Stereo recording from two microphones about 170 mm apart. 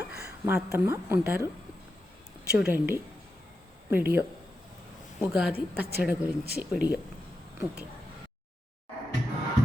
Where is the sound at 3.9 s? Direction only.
10° right (ahead or behind).